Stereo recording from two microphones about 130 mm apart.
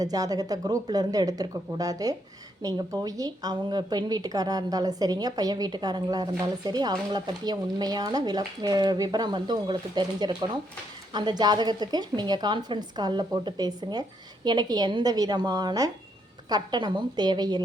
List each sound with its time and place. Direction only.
0.0 s speech: 30° right (ahead or behind)